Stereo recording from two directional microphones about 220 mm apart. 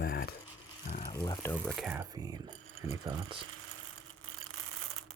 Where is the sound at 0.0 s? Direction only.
45° left (ahead or behind).